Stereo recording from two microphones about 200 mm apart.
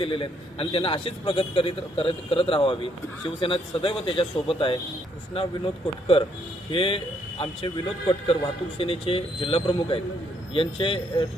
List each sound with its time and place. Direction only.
0.0 s a man's voice: 25° left (ahead or behind)
6.7 s a man's voice: 25° left (ahead or behind)